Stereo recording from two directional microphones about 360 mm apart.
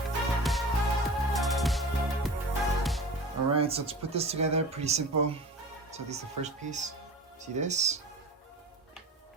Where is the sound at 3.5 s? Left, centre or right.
Centre.